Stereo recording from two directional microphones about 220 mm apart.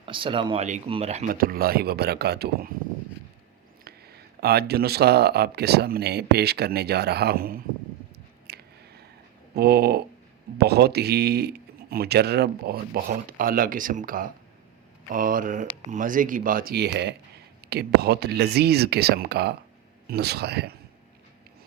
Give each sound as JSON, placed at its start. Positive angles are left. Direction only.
{"t": 0.0, "sound": "speech", "side_deg": -25}
{"t": 3.8, "sound": "speech", "side_deg": -45}
{"t": 8.4, "sound": "chewing", "side_deg": -45}
{"t": 9.6, "sound": "speech", "side_deg": -45}